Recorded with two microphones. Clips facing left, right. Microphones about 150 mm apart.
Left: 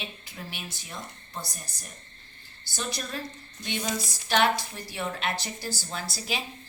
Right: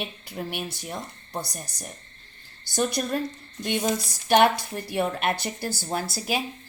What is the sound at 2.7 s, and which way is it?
A woman's voice, 55° right (ahead or behind).